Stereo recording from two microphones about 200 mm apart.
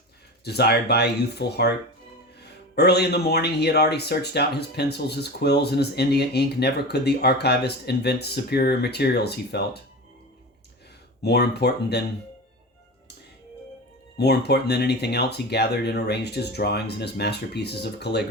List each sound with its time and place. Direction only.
0.4 s speech: 55° left (ahead or behind)
2.7 s speech: 55° left (ahead or behind)
11.2 s speech: 55° left (ahead or behind)
14.2 s speech: 55° left (ahead or behind)